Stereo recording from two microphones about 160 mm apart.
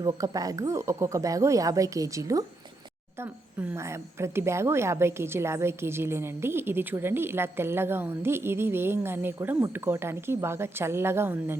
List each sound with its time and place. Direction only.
0.0 s speech: 20° right (ahead or behind)